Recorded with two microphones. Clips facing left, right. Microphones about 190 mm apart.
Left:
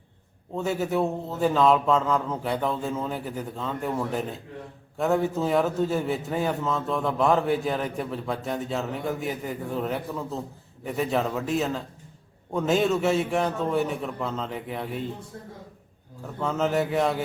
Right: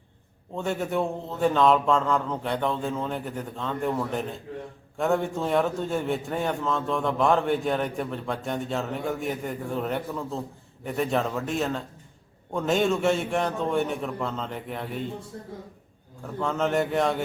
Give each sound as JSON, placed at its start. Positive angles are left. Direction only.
{"t": 0.5, "sound": "a man's voice", "side_deg": 0}
{"t": 16.2, "sound": "a man's voice", "side_deg": 0}